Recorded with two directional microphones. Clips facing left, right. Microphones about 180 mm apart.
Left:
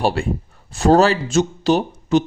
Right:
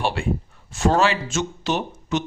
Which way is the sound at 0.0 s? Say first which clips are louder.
Left 4 dB; 40° left (ahead or behind).